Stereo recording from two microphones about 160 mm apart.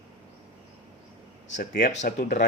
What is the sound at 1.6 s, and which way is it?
Speech, 55° left (ahead or behind).